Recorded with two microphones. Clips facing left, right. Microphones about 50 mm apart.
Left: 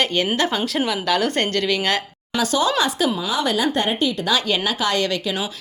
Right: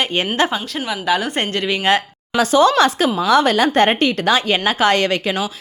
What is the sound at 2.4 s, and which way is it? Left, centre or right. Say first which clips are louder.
Speech: right 7 dB; right.